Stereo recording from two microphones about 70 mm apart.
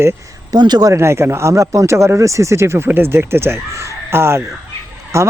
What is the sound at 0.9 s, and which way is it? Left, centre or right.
Speech, right.